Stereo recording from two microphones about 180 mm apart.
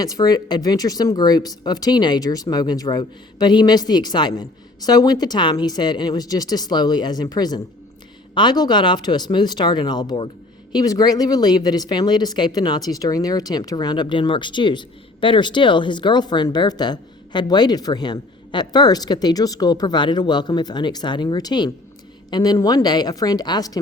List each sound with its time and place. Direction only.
0.0 s speech: 20° left (ahead or behind)